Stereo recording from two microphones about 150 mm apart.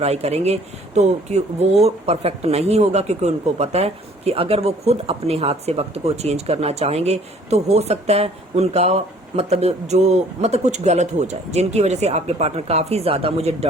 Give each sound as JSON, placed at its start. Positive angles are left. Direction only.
{"t": 0.0, "sound": "speech", "side_deg": -45}